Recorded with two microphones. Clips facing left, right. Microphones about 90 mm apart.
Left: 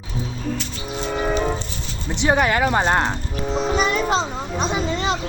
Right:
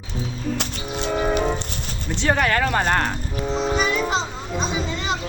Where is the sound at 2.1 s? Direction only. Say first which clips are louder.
Left 2 dB; 15° left (ahead or behind).